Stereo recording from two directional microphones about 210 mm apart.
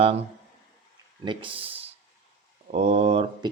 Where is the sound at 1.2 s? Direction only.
25° right (ahead or behind).